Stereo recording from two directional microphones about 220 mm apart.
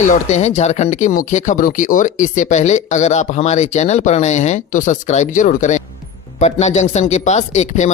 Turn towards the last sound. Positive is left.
turn(degrees=30)  # may be behind; listen again after turning